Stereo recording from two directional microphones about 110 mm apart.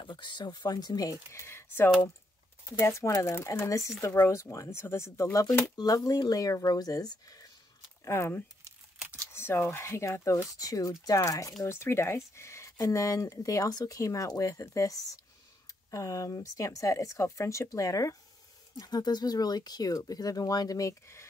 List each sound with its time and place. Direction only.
0.0 s speech: 45° left (ahead or behind)
1.3 s speech: 25° left (ahead or behind)
8.0 s speech: 25° left (ahead or behind)